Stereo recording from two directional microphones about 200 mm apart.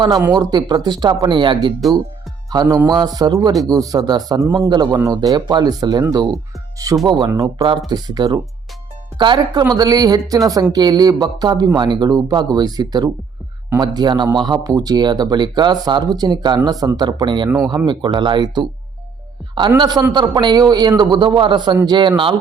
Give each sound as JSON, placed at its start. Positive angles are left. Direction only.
{"t": 0.0, "sound": "speech", "side_deg": -20}
{"t": 19.8, "sound": "speech", "side_deg": -20}